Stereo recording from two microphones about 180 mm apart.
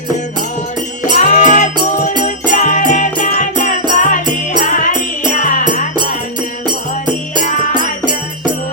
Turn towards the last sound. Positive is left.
turn(degrees=45)  # may be behind; listen again after turning